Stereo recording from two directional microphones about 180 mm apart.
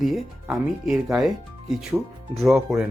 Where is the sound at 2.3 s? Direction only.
Centre (ahead or behind).